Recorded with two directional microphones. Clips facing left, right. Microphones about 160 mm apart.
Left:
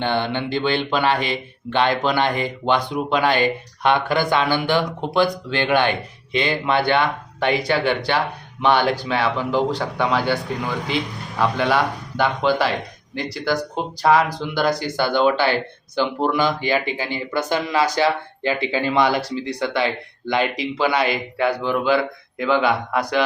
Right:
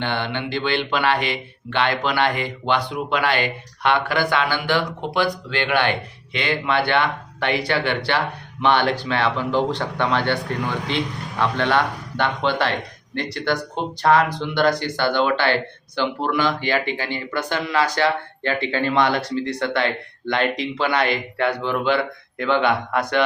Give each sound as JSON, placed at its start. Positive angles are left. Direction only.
{"t": 0.0, "sound": "speech", "side_deg": 15}